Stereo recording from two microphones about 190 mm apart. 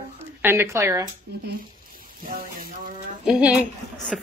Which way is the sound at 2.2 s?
45° right (ahead or behind).